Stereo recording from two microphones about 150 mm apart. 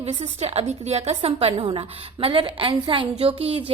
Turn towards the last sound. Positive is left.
turn(degrees=-40)  # may be behind; listen again after turning